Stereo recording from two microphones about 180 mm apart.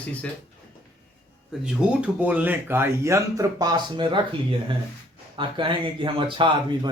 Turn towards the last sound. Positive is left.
turn(degrees=-25)  # may be behind; listen again after turning